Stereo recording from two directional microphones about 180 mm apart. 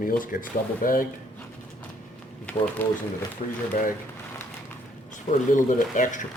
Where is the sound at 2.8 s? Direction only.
10° left (ahead or behind).